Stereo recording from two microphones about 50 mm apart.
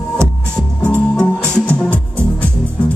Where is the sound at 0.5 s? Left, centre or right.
Left.